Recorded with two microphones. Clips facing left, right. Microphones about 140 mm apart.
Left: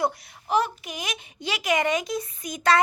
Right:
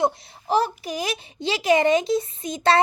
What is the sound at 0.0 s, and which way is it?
A child's voice, 30° right (ahead or behind).